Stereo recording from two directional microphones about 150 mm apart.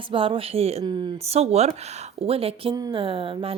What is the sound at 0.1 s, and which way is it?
Speech, 35° right (ahead or behind).